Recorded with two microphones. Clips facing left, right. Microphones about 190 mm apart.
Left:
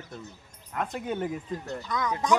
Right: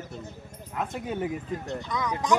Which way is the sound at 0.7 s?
5° right (ahead or behind).